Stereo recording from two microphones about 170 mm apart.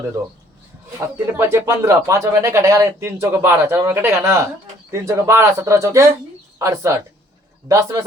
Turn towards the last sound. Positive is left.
turn(degrees=-20)  # may be behind; listen again after turning